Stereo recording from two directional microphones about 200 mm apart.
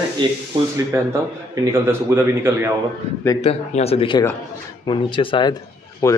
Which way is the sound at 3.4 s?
30° left (ahead or behind).